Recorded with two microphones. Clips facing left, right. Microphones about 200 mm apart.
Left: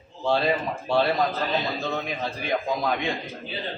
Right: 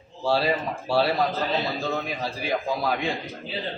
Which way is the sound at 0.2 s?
5° right (ahead or behind).